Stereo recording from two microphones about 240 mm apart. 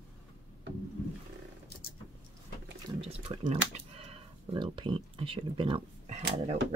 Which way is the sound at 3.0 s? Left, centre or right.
Right.